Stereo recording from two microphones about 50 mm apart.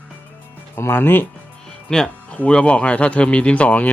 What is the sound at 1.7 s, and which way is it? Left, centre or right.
Music, centre.